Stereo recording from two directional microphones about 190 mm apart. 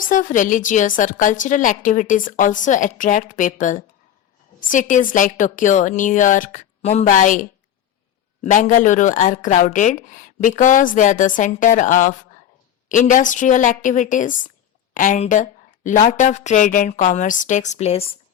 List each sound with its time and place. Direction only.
0.0 s a woman's voice: 45° left (ahead or behind)